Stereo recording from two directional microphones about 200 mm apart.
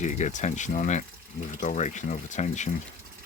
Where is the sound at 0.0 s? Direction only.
35° left (ahead or behind).